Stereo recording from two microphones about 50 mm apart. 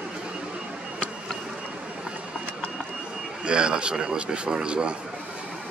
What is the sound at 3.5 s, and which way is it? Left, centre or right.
A man's voice, centre.